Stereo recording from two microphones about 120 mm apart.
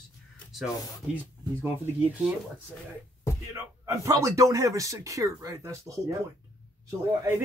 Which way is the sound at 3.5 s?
25° right (ahead or behind).